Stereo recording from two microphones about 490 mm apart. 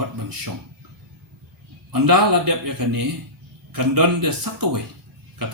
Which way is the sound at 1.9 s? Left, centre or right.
Right.